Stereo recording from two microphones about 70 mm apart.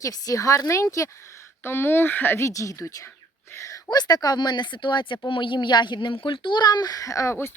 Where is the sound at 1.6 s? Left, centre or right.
Left.